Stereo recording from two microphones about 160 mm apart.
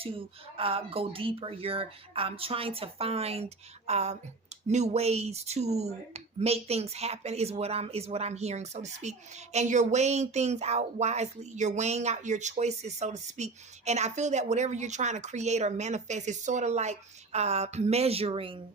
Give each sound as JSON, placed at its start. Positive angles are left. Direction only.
{"t": 0.0, "sound": "speech", "side_deg": -35}